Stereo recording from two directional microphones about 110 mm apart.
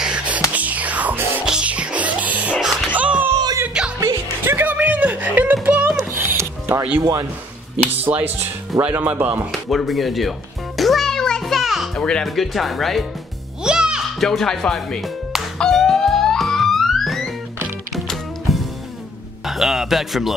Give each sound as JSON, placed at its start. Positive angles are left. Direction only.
{"t": 0.0, "sound": "music", "side_deg": -10}
{"t": 0.5, "sound": "whispering", "side_deg": -15}
{"t": 1.4, "sound": "music", "side_deg": -10}
{"t": 4.0, "sound": "music", "side_deg": -20}
{"t": 7.0, "sound": "speech", "side_deg": -25}
{"t": 9.5, "sound": "speech", "side_deg": 0}
{"t": 10.8, "sound": "music", "side_deg": 0}
{"t": 12.0, "sound": "speech", "side_deg": 5}
{"t": 13.7, "sound": "music", "side_deg": -5}
{"t": 19.4, "sound": "speech", "side_deg": 0}